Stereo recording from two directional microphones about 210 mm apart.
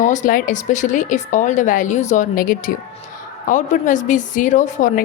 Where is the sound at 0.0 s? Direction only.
35° left (ahead or behind).